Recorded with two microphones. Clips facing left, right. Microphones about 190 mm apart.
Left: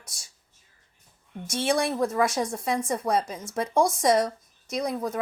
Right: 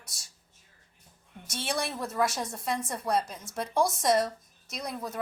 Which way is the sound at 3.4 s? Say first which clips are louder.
Left 4 dB; centre (ahead or behind).